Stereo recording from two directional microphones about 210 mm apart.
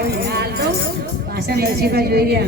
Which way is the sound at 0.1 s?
50° right (ahead or behind).